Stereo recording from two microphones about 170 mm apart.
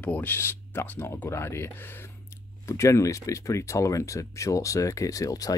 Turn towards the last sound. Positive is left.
turn(degrees=20)  # may be behind; listen again after turning